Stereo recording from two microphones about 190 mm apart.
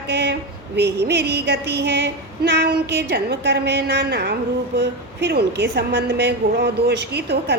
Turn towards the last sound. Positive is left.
turn(degrees=-60)  # may be behind; listen again after turning